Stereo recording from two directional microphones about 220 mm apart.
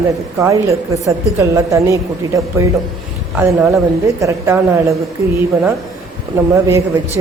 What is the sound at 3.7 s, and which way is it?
A woman's voice, 15° right (ahead or behind).